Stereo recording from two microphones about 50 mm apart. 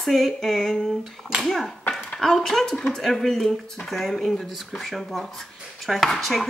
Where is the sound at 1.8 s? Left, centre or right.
Left.